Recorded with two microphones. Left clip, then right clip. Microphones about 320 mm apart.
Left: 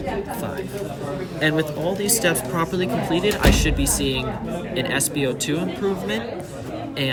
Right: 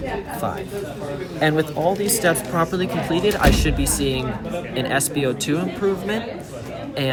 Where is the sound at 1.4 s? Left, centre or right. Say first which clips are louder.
Right 3 dB; centre.